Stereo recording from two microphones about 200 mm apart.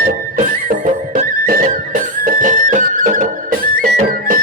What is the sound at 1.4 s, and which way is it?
Music, 45° right (ahead or behind).